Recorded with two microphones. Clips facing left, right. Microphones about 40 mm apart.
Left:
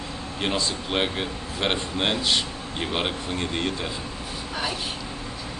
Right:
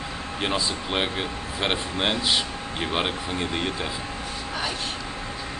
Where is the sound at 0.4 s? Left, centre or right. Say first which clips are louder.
Even; centre.